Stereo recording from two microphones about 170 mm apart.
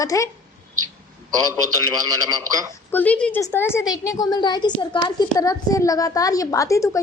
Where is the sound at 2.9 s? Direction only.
10° left (ahead or behind).